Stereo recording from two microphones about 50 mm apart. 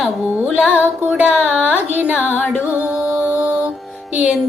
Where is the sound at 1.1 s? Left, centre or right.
Right.